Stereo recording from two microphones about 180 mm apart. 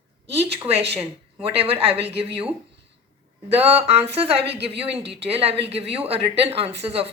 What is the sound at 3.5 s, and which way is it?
Speech, 35° right (ahead or behind).